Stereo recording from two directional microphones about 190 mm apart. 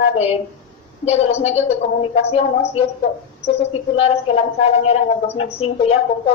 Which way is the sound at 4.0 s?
30° left (ahead or behind).